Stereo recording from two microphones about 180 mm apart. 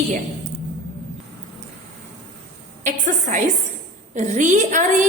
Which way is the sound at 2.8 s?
45° right (ahead or behind).